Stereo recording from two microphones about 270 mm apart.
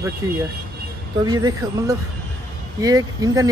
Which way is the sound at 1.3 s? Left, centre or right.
Centre.